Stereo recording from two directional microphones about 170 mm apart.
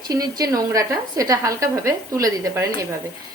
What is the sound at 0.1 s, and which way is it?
A woman's voice, 20° right (ahead or behind).